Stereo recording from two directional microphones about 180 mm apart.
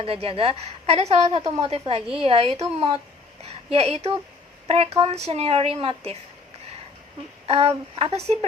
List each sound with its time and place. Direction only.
0.0 s a woman's voice: 30° right (ahead or behind)
7.4 s a woman's voice: 35° right (ahead or behind)